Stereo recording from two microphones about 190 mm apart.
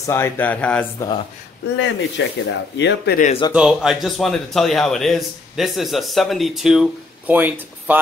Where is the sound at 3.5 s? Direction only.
5° right (ahead or behind).